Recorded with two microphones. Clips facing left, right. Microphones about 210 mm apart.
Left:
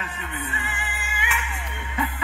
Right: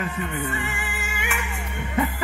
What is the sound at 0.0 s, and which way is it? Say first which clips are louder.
Music: right 6 dB; 45° right (ahead or behind).